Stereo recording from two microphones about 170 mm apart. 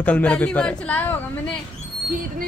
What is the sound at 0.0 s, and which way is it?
A woman's voice, 10° left (ahead or behind).